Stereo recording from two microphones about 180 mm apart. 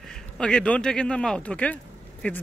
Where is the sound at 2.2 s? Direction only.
5° left (ahead or behind).